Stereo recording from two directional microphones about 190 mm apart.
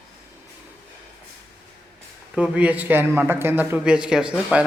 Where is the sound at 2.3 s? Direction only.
5° right (ahead or behind).